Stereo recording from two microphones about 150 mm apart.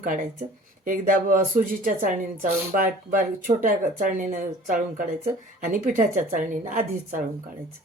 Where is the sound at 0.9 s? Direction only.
70° right (ahead or behind).